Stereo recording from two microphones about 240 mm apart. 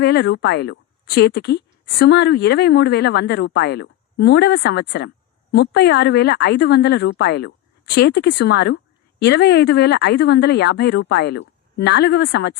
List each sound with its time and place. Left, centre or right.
0.0 s a woman's voice: left